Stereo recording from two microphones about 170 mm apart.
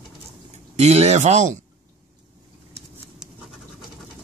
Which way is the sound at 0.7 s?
40° right (ahead or behind).